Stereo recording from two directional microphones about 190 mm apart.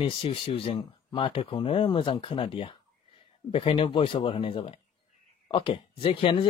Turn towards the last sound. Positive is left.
turn(degrees=30)  # may be behind; listen again after turning